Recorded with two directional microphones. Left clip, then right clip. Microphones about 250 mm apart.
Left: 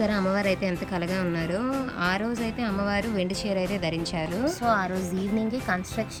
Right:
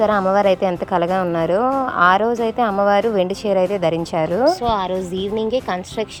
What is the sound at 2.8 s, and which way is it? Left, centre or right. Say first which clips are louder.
Speech: right 12 dB; right.